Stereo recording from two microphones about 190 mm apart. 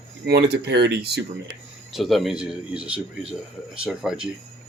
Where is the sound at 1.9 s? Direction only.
Centre (ahead or behind).